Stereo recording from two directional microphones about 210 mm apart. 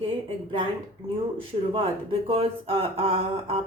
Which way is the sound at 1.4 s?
25° right (ahead or behind).